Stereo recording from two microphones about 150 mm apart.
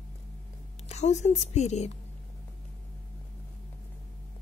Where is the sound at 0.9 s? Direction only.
50° left (ahead or behind).